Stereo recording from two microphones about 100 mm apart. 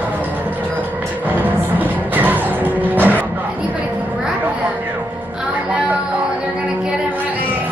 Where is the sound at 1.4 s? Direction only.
15° right (ahead or behind).